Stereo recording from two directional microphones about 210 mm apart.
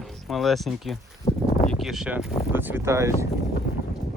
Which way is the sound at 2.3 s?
30° left (ahead or behind).